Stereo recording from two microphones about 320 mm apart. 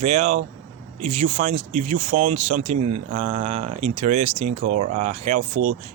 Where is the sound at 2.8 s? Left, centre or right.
Right.